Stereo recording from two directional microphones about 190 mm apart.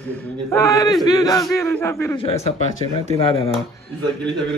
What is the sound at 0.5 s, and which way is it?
Speech, 15° left (ahead or behind).